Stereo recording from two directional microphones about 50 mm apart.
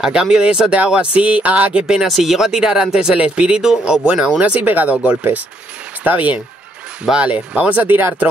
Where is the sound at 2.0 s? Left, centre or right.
Centre; by 4.3 s right.